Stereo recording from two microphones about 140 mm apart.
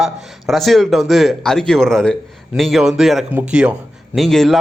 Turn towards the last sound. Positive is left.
turn(degrees=0)  # may be behind; listen again after turning